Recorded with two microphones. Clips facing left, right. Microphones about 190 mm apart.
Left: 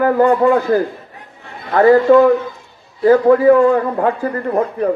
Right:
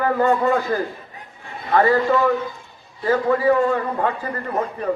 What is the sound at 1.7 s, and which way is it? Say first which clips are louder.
A man's voice: left 8 dB; 50° left (ahead or behind).